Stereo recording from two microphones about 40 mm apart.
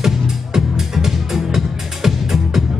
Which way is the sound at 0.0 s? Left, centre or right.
Centre.